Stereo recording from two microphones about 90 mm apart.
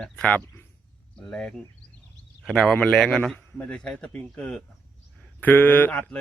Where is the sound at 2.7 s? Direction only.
10° left (ahead or behind).